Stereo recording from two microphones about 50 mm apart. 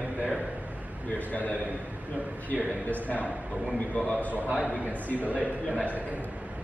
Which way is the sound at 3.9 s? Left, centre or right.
Left.